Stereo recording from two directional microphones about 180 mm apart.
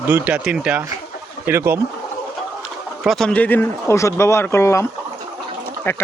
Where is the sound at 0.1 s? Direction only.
10° right (ahead or behind).